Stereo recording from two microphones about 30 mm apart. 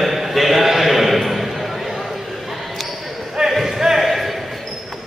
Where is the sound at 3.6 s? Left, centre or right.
Centre.